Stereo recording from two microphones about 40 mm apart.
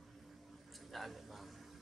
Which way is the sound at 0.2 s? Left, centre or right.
Centre.